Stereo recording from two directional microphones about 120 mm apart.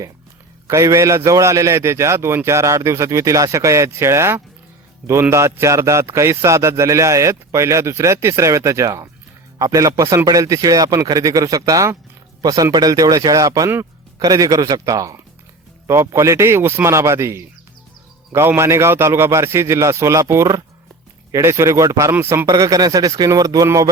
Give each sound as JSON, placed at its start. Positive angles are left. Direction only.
{"t": 0.7, "sound": "speech", "side_deg": -25}